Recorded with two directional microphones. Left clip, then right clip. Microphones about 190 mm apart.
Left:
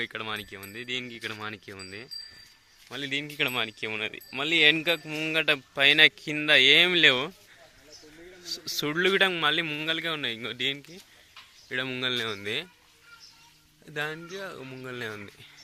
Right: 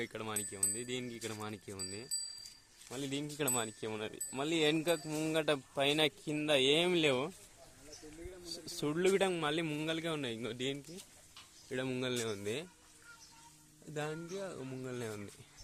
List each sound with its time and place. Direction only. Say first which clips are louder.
0.0 s speech: left 8 dB; centre (ahead or behind)
8.4 s speech: left 9 dB; centre (ahead or behind)
13.9 s speech: left 7 dB; centre (ahead or behind)